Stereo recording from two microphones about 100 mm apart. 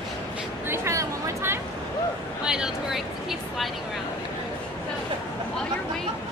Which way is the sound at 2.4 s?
5° right (ahead or behind).